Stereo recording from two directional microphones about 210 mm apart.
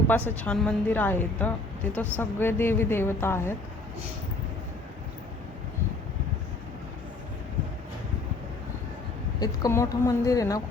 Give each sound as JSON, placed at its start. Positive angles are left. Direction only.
{"t": 0.1, "sound": "a woman's voice", "side_deg": 5}
{"t": 9.4, "sound": "a woman's voice", "side_deg": 15}